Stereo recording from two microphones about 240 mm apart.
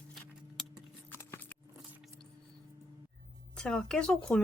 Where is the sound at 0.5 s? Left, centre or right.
Centre.